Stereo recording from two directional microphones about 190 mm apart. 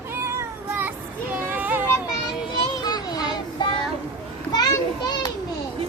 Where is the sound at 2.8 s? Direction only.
20° left (ahead or behind).